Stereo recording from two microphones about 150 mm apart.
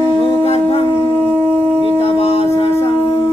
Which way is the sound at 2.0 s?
40° left (ahead or behind).